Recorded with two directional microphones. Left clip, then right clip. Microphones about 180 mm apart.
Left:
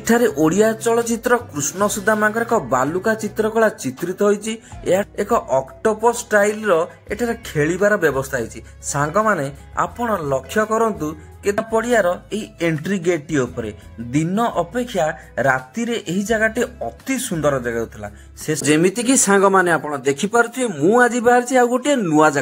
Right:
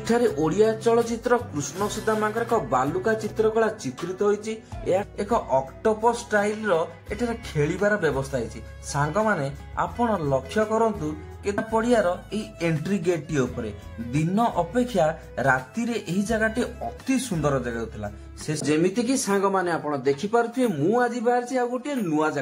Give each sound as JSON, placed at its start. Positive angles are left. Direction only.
{"t": 0.0, "sound": "speech", "side_deg": 30}
{"t": 18.7, "sound": "speech", "side_deg": 40}